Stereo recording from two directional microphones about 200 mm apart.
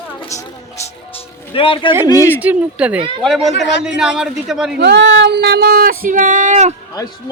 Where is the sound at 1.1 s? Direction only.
25° left (ahead or behind).